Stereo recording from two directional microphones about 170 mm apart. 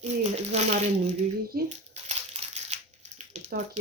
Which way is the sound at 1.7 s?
40° right (ahead or behind).